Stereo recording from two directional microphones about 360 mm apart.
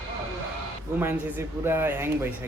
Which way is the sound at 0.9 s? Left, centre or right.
Centre.